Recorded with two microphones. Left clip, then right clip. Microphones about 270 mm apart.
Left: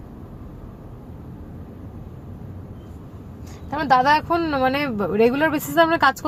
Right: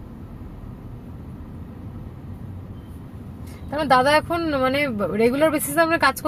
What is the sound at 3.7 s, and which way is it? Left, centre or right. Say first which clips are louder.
A woman's voice: even; centre.